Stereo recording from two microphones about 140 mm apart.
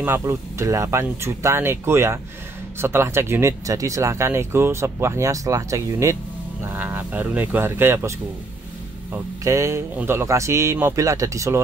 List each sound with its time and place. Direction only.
0.0 s speech: 20° right (ahead or behind)
9.1 s speech: 20° right (ahead or behind)